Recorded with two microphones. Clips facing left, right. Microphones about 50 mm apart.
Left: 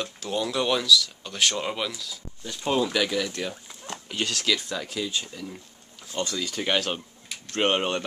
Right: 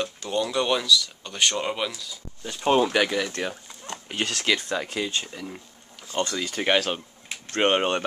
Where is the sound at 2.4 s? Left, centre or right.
Right.